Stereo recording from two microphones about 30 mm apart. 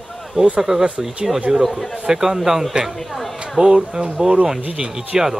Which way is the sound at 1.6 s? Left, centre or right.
Centre.